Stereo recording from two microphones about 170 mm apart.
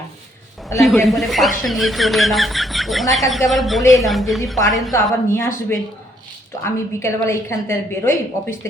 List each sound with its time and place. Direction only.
0.8 s speech: centre (ahead or behind)
4.9 s a woman's voice: 15° left (ahead or behind)